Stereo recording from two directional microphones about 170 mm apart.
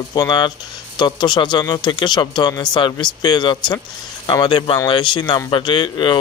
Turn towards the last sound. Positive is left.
turn(degrees=25)  # may be behind; listen again after turning